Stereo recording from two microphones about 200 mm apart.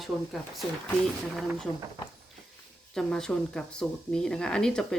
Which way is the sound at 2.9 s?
5° left (ahead or behind).